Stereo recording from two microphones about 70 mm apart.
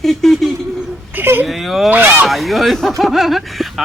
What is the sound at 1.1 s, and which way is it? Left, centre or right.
Speech, right.